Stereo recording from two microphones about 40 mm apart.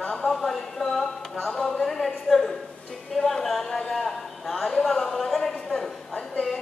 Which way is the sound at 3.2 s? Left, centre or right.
Centre.